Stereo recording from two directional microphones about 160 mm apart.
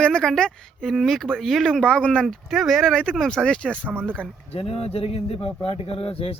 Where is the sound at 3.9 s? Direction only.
10° right (ahead or behind).